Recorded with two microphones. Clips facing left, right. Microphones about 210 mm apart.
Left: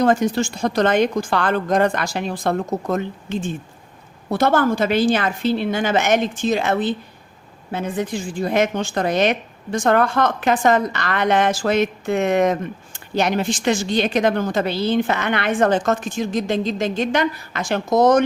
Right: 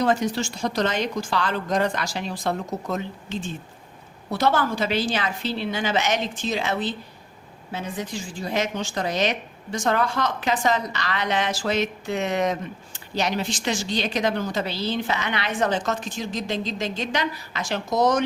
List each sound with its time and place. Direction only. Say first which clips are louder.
0.0 s a woman's voice: left 5 dB; 50° left (ahead or behind)